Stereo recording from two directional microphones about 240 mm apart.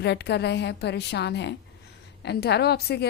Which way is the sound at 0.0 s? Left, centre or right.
Left.